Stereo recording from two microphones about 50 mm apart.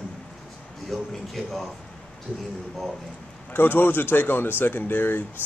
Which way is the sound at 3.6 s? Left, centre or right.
Left.